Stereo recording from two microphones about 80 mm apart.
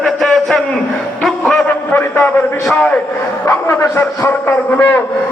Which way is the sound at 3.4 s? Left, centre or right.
Left.